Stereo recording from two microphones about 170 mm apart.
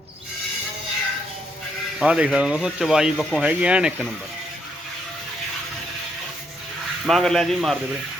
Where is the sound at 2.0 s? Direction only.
5° right (ahead or behind).